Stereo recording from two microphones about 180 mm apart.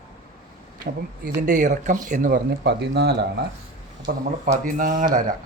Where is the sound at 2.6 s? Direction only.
70° right (ahead or behind).